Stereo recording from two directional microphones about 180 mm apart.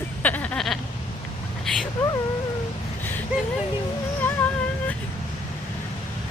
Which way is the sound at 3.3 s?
5° right (ahead or behind).